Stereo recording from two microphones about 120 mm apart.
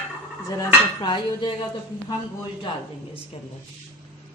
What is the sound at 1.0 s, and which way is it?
Dishes, 40° left (ahead or behind).